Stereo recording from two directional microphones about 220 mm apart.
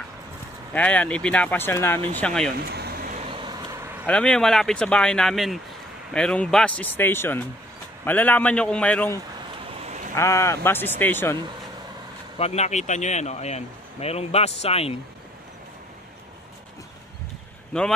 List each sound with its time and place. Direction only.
0.7 s speech: 5° left (ahead or behind)
2.7 s vehicle: 45° right (ahead or behind); by 3.9 s 15° right (ahead or behind)
4.0 s speech: 5° left (ahead or behind)
9.8 s a sound: 30° right (ahead or behind)
10.1 s speech: 15° left (ahead or behind)
12.4 s speech: 30° left (ahead or behind)